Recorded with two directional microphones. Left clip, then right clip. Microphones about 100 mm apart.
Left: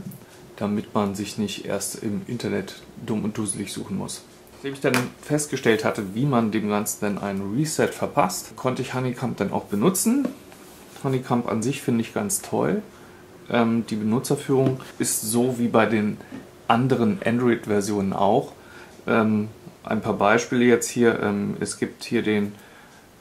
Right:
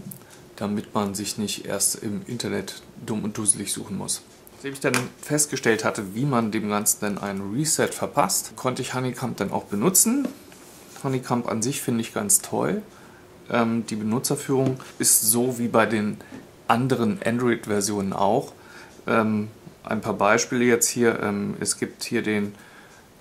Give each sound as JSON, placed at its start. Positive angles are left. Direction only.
{"t": 0.6, "sound": "speech", "side_deg": -30}